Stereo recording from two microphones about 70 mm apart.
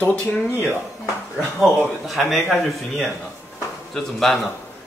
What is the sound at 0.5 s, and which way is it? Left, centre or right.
Speech, left.